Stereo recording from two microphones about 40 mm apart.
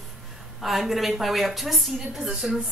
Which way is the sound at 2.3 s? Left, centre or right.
Centre.